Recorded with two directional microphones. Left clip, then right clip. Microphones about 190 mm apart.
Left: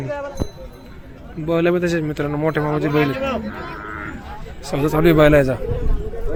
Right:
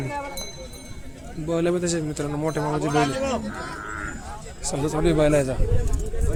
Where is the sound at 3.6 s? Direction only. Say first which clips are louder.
Left 2 dB; 25° right (ahead or behind).